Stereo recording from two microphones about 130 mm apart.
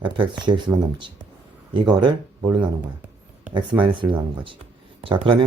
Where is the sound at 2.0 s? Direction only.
35° right (ahead or behind).